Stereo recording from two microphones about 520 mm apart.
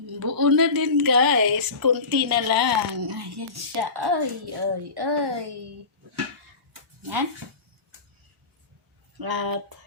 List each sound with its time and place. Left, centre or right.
0.2 s a woman's voice: right
9.1 s speech: right